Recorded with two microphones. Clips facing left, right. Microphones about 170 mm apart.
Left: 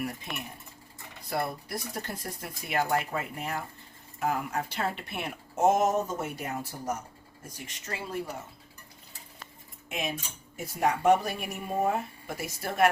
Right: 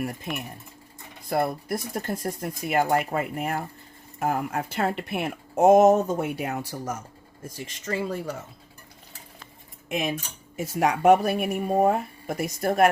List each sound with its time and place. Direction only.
1.3 s speech: 50° right (ahead or behind); by 6.9 s 75° right (ahead or behind)
7.4 s speech: 90° right
9.9 s speech: 90° right
10.8 s speech: 70° right (ahead or behind); by 12.9 s 50° right (ahead or behind)